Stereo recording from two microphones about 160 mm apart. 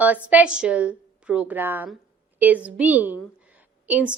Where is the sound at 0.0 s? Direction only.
10° right (ahead or behind).